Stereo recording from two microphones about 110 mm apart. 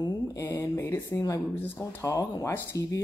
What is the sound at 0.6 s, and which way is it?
Speech, 25° left (ahead or behind).